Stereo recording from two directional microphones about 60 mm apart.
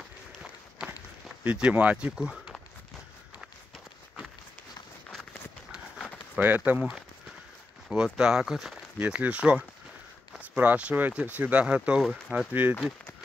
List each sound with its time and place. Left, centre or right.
1.4 s speech: right
6.4 s speech: right
7.9 s speech: centre
9.0 s speech: right
12.4 s speech: right